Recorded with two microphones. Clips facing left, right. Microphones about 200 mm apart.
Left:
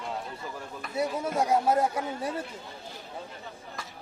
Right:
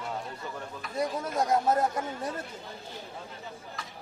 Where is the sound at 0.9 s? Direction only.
10° left (ahead or behind).